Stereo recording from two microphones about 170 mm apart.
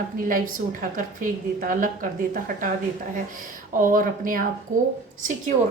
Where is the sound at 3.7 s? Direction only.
55° right (ahead or behind).